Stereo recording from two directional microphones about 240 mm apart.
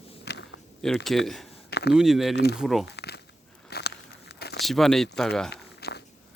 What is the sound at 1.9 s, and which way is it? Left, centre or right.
Speech, centre.